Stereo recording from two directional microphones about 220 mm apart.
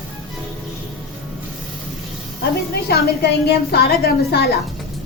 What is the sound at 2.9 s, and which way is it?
A woman's voice, 45° left (ahead or behind).